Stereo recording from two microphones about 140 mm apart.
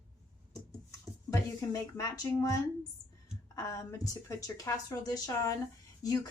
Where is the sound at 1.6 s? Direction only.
25° left (ahead or behind).